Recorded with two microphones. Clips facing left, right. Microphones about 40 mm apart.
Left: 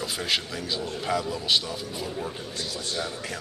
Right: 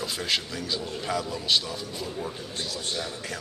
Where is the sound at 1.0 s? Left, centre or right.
Centre.